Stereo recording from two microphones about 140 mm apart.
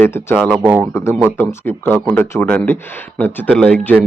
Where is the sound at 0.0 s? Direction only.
15° left (ahead or behind).